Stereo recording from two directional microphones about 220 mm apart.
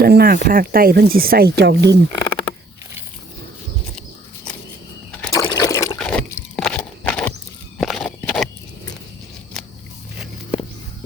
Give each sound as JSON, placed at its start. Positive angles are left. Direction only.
{"t": 0.0, "sound": "speech", "side_deg": -45}
{"t": 2.2, "sound": "frog", "side_deg": 5}
{"t": 5.2, "sound": "a sound", "side_deg": 15}
{"t": 7.8, "sound": "horse", "side_deg": 0}